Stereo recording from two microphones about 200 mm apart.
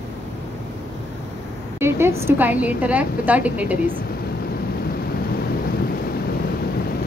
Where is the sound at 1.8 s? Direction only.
15° right (ahead or behind).